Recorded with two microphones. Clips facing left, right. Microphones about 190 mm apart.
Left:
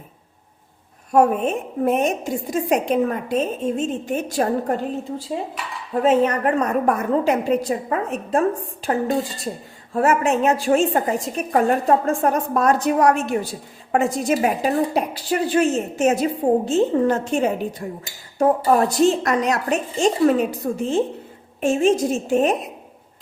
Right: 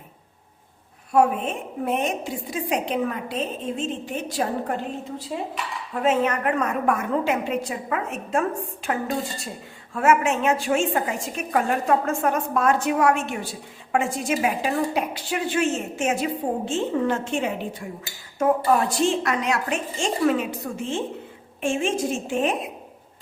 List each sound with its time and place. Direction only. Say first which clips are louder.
1.1 s a woman's voice: left 3 dB; 45° left (ahead or behind)
5.9 s a woman's voice: left 5 dB; 35° left (ahead or behind)